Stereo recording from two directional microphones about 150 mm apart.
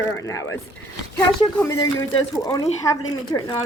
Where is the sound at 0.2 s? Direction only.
20° left (ahead or behind).